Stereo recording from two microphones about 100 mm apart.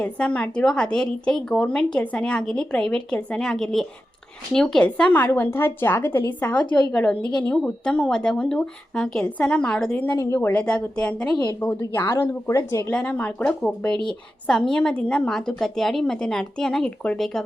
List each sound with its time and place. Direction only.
0.0 s a woman's voice: 10° left (ahead or behind)
10.2 s speech: 30° left (ahead or behind)
10.5 s a woman's voice: 10° left (ahead or behind)
11.8 s speech: 25° left (ahead or behind)
12.9 s a woman's voice: 15° left (ahead or behind)